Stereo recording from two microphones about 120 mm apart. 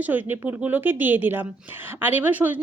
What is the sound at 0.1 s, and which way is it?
Speech, 15° right (ahead or behind).